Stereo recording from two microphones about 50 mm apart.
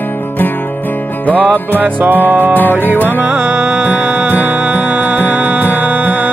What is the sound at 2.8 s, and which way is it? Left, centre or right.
Music, left.